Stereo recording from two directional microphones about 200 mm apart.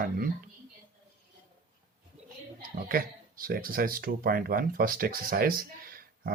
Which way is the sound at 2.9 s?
45° right (ahead or behind).